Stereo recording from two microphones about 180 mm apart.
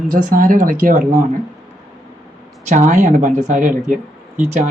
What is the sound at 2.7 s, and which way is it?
Speech, 40° right (ahead or behind).